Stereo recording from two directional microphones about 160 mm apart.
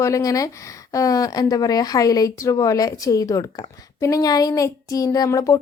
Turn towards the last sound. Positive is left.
turn(degrees=20)  # may be behind; listen again after turning